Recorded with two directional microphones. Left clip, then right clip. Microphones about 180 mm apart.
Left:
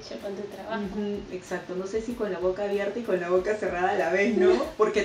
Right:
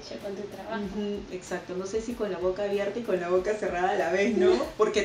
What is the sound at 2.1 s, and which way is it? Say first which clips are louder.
Speech: left 2 dB; 15° left (ahead or behind).